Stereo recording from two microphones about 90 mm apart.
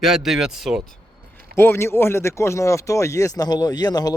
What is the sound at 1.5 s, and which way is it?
Speech, 25° left (ahead or behind).